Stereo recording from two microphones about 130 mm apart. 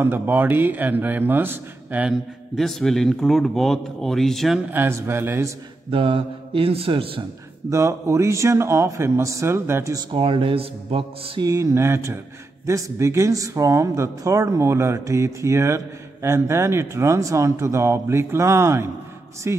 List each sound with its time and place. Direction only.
0.0 s a man's voice: 15° right (ahead or behind)
2.5 s speech: centre (ahead or behind)
4.7 s speech: 20° right (ahead or behind)
5.9 s a man's voice: 45° right (ahead or behind)
7.7 s speech: 20° right (ahead or behind)
10.1 s a man's voice: 45° right (ahead or behind)
11.4 s speech: 25° right (ahead or behind)